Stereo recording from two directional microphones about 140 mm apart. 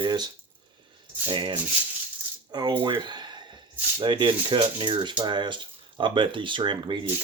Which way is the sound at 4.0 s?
35° right (ahead or behind).